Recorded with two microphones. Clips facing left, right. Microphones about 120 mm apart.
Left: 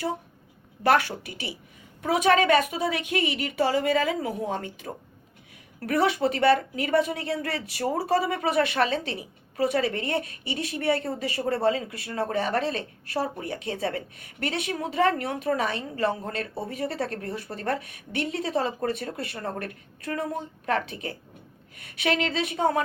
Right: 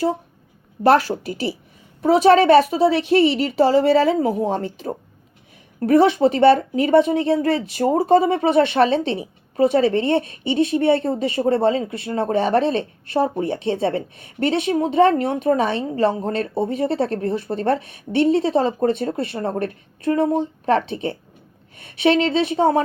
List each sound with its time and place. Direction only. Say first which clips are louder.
0.8 s a woman's voice: right 7 dB; 30° right (ahead or behind)